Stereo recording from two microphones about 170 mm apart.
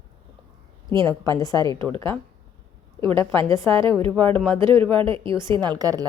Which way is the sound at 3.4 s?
15° left (ahead or behind).